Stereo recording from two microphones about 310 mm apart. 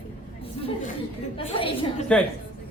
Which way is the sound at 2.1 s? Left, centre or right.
Centre.